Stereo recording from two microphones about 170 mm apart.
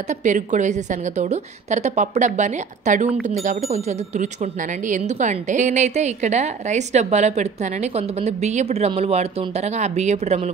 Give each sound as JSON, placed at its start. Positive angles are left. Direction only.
{"t": 0.2, "sound": "a woman's voice", "side_deg": -45}